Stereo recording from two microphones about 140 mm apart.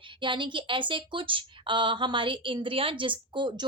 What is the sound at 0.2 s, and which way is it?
A woman's voice, 35° right (ahead or behind).